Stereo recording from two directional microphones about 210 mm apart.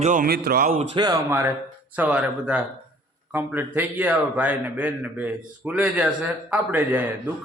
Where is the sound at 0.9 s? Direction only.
15° right (ahead or behind).